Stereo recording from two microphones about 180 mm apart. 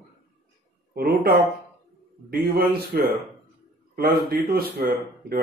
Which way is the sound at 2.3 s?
60° right (ahead or behind).